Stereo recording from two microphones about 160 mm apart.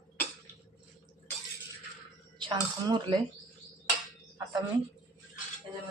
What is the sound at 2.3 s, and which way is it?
Speech, 30° right (ahead or behind).